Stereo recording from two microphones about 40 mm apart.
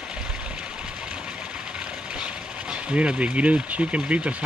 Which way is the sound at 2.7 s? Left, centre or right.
Right.